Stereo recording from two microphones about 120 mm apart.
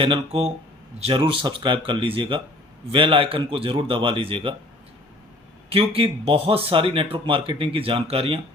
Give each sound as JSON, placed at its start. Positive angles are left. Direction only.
{"t": 0.0, "sound": "speech", "side_deg": -50}
{"t": 5.6, "sound": "speech", "side_deg": -50}